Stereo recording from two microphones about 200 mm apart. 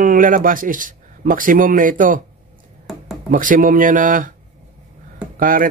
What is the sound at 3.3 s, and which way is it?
Speech, 40° right (ahead or behind).